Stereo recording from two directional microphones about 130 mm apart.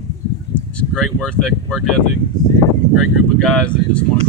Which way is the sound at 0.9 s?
5° left (ahead or behind).